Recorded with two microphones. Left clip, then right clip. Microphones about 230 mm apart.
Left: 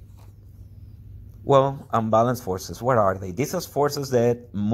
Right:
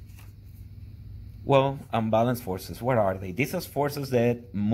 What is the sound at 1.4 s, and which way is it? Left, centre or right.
Speech, left.